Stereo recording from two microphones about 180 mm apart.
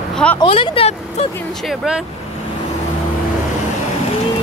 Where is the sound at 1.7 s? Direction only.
5° right (ahead or behind).